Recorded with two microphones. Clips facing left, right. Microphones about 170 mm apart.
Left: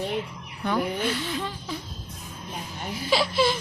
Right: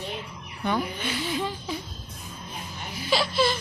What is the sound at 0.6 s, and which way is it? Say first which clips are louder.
Speech: left 2 dB; centre (ahead or behind).